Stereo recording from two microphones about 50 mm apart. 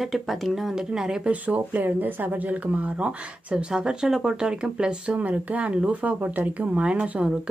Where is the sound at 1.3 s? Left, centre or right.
Right.